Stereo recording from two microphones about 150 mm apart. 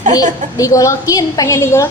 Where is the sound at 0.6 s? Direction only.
20° left (ahead or behind).